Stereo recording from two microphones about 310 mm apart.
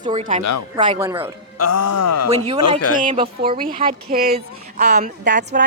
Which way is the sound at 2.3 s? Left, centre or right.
Centre.